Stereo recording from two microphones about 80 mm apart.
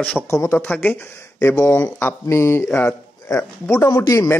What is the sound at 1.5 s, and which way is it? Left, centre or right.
Speech, left.